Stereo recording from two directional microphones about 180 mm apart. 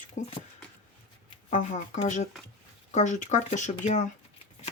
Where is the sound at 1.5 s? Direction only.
40° left (ahead or behind).